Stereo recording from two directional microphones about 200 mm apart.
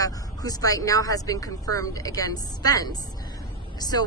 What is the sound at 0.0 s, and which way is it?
Speech, 20° left (ahead or behind).